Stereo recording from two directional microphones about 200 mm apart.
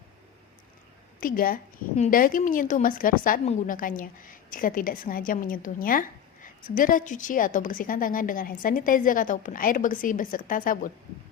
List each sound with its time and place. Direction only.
1.2 s a woman's voice: 45° left (ahead or behind)